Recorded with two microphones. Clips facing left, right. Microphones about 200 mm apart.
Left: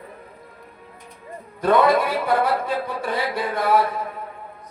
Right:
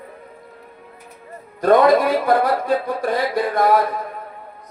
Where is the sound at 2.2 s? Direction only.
40° right (ahead or behind).